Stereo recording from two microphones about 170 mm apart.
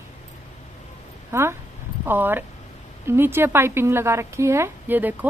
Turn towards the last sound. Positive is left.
turn(degrees=-10)  # may be behind; listen again after turning